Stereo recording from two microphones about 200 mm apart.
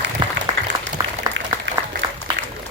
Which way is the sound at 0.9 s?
20° right (ahead or behind).